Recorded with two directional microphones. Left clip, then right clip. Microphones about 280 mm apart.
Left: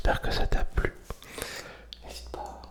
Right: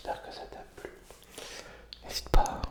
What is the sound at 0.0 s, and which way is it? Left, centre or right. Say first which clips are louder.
Whispering: left 9 dB; left.